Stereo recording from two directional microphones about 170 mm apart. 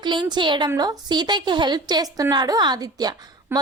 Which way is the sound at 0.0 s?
25° right (ahead or behind).